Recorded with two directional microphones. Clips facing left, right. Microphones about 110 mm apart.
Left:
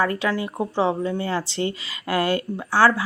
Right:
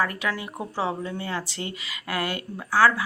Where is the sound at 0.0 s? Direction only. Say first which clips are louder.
Left 5 dB; 30° left (ahead or behind).